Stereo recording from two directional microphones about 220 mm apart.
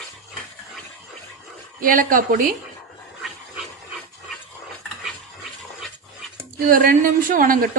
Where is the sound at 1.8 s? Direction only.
40° right (ahead or behind).